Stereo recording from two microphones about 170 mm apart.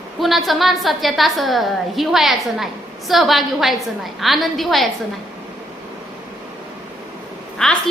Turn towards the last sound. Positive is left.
turn(degrees=5)  # may be behind; listen again after turning